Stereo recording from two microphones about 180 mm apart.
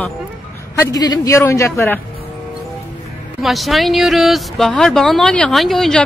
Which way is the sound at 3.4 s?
Centre (ahead or behind).